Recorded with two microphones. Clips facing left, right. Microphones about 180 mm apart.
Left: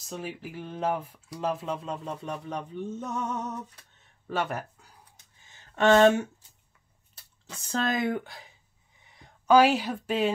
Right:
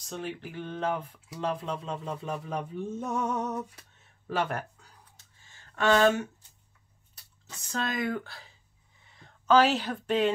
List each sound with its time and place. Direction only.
0.0 s speech: 5° left (ahead or behind)
4.3 s speech: centre (ahead or behind)
5.4 s a sound: 20° left (ahead or behind)
7.6 s speech: 20° left (ahead or behind); by 10.3 s 5° left (ahead or behind)